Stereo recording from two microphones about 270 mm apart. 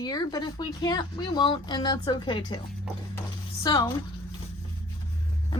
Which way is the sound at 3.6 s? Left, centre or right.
Centre.